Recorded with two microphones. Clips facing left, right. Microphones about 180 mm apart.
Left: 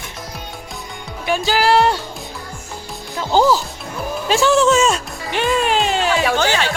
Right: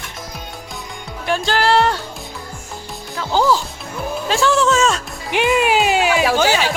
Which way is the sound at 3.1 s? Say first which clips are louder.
Left 3 dB; 20° left (ahead or behind).